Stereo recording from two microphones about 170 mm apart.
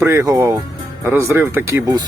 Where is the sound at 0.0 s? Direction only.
15° right (ahead or behind).